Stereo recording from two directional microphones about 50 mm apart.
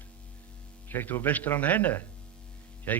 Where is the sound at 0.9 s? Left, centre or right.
Left.